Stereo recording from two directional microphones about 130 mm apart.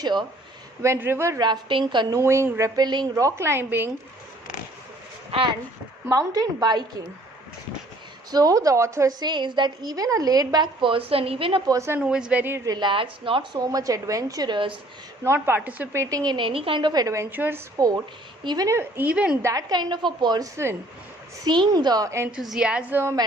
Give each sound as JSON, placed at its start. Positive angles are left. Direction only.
{"t": 0.0, "sound": "a woman's voice", "side_deg": -35}
{"t": 0.8, "sound": "a woman's voice", "side_deg": -20}
{"t": 1.4, "sound": "a woman's voice", "side_deg": -35}
{"t": 2.1, "sound": "a woman's voice", "side_deg": -20}
{"t": 6.1, "sound": "a woman's voice", "side_deg": -30}
{"t": 8.3, "sound": "a woman's voice", "side_deg": -30}
{"t": 9.2, "sound": "a woman's voice", "side_deg": -35}
{"t": 11.7, "sound": "a woman's voice", "side_deg": -20}
{"t": 11.9, "sound": "speech", "side_deg": -5}
{"t": 12.6, "sound": "a woman's voice", "side_deg": -35}
{"t": 15.2, "sound": "a woman's voice", "side_deg": -20}
{"t": 17.7, "sound": "a woman's voice", "side_deg": -25}
{"t": 19.4, "sound": "a woman's voice", "side_deg": -25}
{"t": 22.3, "sound": "speech", "side_deg": -5}